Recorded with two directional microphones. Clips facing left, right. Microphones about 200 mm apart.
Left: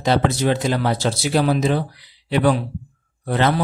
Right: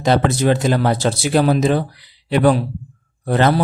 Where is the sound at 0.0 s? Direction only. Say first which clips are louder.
Right 3 dB; 45° right (ahead or behind).